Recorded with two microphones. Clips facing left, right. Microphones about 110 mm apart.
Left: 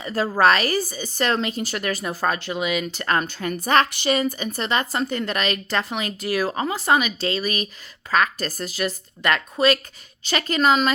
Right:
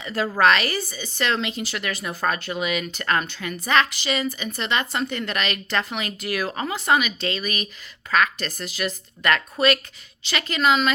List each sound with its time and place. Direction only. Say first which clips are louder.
0.0 s a woman's voice: left 1 dB; 40° left (ahead or behind)
2.2 s a woman's voice: left 1 dB; 25° left (ahead or behind)
9.2 s speech: left 1 dB; 30° left (ahead or behind)
10.2 s a woman's voice: left 2 dB; 40° left (ahead or behind)